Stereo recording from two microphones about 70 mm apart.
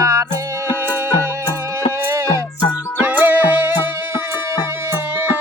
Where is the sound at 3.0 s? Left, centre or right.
Right.